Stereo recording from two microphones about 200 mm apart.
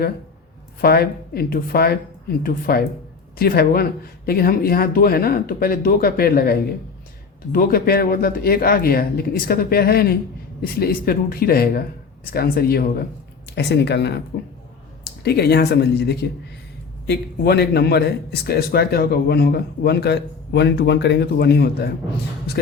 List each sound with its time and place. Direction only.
0.8 s a man's voice: 50° left (ahead or behind)